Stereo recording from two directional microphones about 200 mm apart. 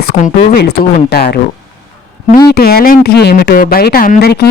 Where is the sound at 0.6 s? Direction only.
55° left (ahead or behind).